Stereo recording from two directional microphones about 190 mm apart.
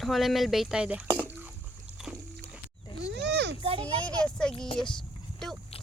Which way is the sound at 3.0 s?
65° right (ahead or behind).